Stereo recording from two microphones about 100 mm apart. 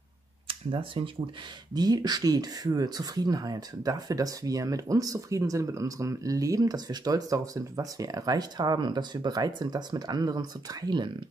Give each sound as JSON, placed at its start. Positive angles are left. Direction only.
{"t": 0.5, "sound": "speech", "side_deg": -60}
{"t": 1.7, "sound": "speech", "side_deg": -40}